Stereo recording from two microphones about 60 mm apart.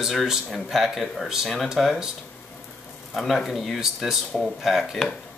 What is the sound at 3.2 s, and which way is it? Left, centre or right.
Speech, centre.